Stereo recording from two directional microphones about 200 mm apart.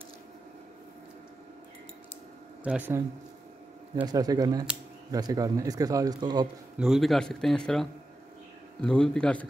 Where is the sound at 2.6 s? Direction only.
5° right (ahead or behind).